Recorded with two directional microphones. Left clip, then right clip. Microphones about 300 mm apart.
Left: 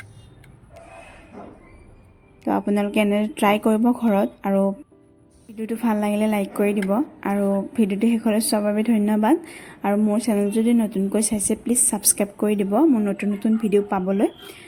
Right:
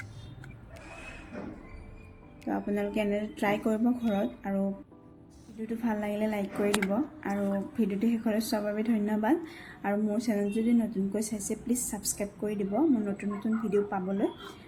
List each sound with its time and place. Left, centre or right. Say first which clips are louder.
2.5 s a woman's voice: left 9 dB; left